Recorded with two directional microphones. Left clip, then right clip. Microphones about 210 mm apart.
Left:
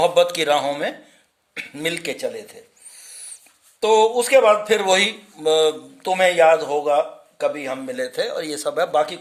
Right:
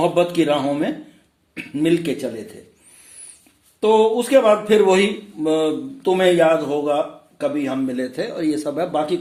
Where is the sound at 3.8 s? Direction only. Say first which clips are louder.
Even; 50° left (ahead or behind).